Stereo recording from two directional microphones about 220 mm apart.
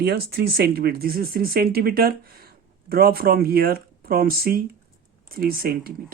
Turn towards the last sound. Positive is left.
turn(degrees=-45)  # may be behind; listen again after turning